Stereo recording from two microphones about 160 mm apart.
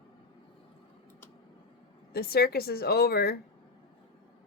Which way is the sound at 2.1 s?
75° left (ahead or behind).